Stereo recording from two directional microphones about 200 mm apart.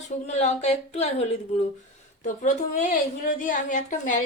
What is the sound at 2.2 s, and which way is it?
A woman's voice, 40° left (ahead or behind).